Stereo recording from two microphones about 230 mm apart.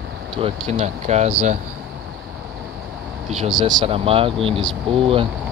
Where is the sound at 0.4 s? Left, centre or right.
Right.